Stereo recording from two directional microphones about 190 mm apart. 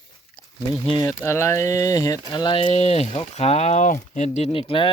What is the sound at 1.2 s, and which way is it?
Speech, 15° left (ahead or behind).